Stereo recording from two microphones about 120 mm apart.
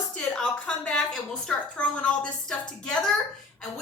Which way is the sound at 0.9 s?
5° left (ahead or behind).